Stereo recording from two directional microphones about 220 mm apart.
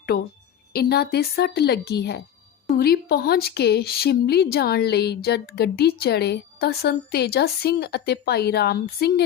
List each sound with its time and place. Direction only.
0.7 s speech: 45° left (ahead or behind)